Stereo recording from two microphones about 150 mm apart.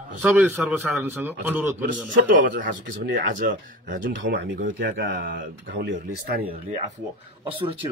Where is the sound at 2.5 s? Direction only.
60° right (ahead or behind).